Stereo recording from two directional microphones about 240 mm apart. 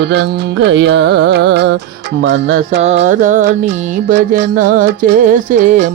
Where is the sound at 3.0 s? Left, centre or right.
Right.